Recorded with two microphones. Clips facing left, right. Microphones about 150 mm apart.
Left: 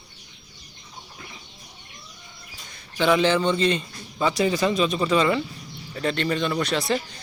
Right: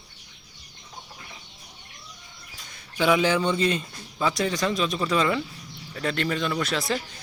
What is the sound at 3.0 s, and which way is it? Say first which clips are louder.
A man's voice: left 2 dB; 10° right (ahead or behind).